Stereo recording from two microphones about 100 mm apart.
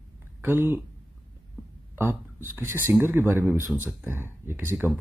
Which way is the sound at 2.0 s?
20° right (ahead or behind).